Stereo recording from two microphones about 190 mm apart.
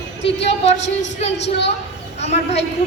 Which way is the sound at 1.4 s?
65° left (ahead or behind).